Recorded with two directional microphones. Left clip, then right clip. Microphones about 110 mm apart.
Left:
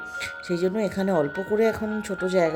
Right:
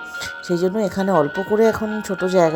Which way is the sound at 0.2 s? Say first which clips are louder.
Right 5 dB; 25° right (ahead or behind).